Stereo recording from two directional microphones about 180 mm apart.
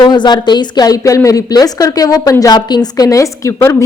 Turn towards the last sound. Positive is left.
turn(degrees=15)  # may be behind; listen again after turning